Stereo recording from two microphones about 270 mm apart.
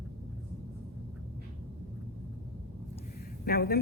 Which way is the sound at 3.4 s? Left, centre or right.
Left.